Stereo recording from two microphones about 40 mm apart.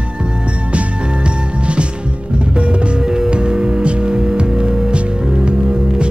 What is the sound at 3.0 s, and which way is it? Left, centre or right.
Music, right.